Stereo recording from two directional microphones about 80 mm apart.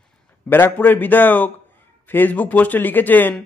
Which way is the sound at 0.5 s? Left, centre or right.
Left.